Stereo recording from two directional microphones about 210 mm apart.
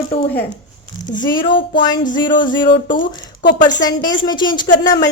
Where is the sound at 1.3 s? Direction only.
25° left (ahead or behind).